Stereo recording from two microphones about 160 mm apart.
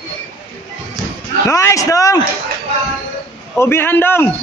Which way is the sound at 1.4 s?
20° left (ahead or behind).